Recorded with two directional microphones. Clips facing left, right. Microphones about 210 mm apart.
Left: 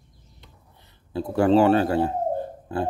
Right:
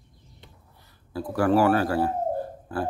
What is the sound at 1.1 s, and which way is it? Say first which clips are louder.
Speech: left 3 dB; 25° left (ahead or behind).